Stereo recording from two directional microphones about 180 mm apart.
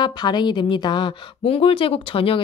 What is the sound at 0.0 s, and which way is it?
A woman's voice, 25° left (ahead or behind).